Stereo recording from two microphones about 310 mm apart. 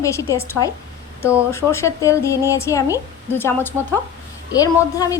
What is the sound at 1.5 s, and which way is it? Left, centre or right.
Speech, centre.